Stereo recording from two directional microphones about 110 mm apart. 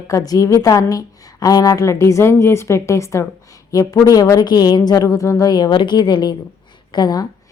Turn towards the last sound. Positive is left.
turn(degrees=40)  # may be behind; listen again after turning